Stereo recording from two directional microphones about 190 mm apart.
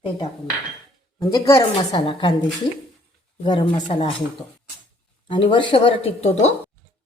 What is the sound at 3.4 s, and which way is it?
Speech, 25° left (ahead or behind).